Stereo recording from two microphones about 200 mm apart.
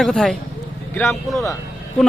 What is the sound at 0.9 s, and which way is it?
Speech, 10° left (ahead or behind).